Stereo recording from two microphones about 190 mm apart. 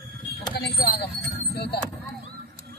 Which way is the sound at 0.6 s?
60° left (ahead or behind).